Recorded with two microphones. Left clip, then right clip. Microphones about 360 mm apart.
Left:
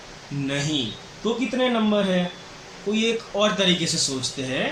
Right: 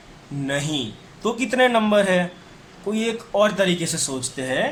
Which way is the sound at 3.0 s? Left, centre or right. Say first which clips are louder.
Right 3 dB; right.